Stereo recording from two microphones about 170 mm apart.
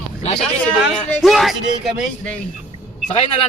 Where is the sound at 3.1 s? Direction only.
40° left (ahead or behind).